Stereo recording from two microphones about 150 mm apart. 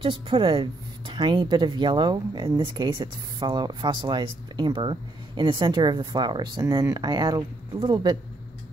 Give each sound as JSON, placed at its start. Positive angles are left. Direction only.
{"t": 0.0, "sound": "speech", "side_deg": -35}